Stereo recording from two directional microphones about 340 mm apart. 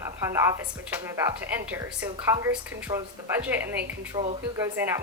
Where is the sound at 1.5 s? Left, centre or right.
Centre.